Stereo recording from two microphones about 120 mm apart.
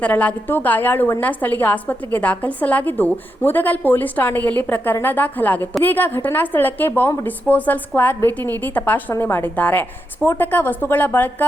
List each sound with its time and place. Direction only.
0.0 s a woman's voice: 10° left (ahead or behind)